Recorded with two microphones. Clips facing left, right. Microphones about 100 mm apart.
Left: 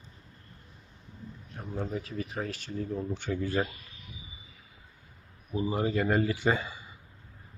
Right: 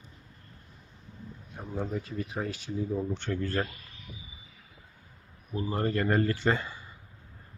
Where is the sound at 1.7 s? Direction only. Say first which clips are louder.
Right 1 dB; centre (ahead or behind).